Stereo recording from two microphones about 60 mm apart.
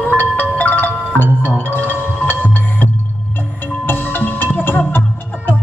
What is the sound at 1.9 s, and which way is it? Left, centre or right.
Music, left.